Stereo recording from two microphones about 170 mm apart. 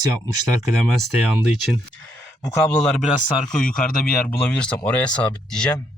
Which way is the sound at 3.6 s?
55° left (ahead or behind).